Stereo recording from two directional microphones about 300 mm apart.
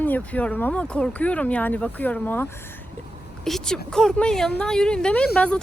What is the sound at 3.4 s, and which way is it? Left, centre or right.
Speech, centre.